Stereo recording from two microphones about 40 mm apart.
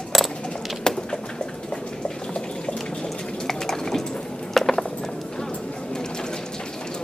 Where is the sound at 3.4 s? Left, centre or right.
Centre.